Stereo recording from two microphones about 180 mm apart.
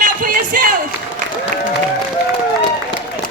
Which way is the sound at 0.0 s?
50° right (ahead or behind).